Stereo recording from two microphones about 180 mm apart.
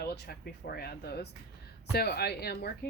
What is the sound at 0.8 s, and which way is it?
Speech, 65° left (ahead or behind).